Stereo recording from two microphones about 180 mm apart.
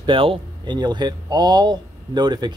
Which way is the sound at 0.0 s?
25° right (ahead or behind).